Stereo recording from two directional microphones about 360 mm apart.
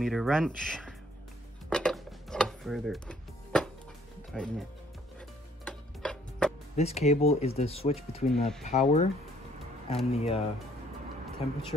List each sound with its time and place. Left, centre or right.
0.0 s speech: centre
1.7 s music: centre
4.3 s speech: centre
5.7 s music: centre
6.8 s speech: centre
10.1 s speech: centre